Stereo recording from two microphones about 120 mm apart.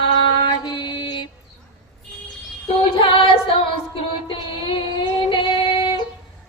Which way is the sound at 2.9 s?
50° left (ahead or behind).